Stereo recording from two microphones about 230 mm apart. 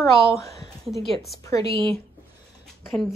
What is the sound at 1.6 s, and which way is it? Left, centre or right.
Speech, right.